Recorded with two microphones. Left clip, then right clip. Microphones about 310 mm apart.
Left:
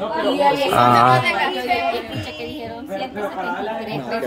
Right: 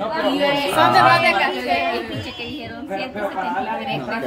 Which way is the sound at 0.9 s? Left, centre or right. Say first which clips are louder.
Right 3 dB; right.